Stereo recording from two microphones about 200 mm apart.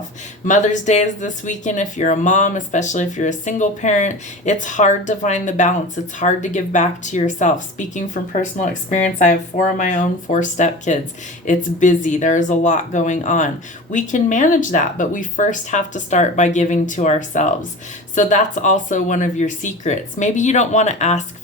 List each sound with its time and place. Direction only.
0.4 s speech: 40° left (ahead or behind)